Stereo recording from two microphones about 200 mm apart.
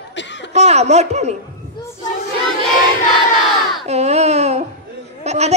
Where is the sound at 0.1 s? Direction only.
60° left (ahead or behind).